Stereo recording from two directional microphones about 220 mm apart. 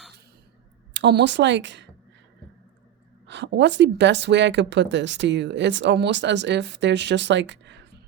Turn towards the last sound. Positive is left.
turn(degrees=-55)  # may be behind; listen again after turning